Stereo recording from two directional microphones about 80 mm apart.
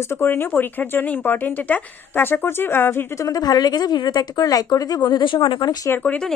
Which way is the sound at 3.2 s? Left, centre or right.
Left.